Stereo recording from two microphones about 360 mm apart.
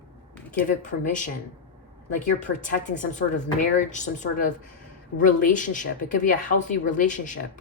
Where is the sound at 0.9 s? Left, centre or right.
Left.